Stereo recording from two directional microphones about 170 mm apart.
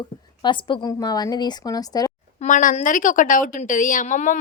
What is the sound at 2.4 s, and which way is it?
A woman's voice, 50° left (ahead or behind).